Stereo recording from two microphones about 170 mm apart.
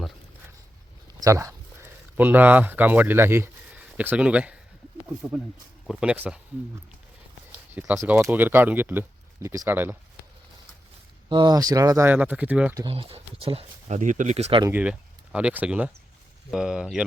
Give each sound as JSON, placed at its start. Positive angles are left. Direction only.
{"t": 1.2, "sound": "speech", "side_deg": -20}
{"t": 5.8, "sound": "speech", "side_deg": -5}
{"t": 7.7, "sound": "speech", "side_deg": -10}
{"t": 11.3, "sound": "speech", "side_deg": -25}
{"t": 12.9, "sound": "speech", "side_deg": -35}
{"t": 14.6, "sound": "speech", "side_deg": -10}